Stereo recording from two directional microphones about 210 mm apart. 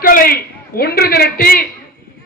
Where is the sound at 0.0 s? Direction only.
45° left (ahead or behind).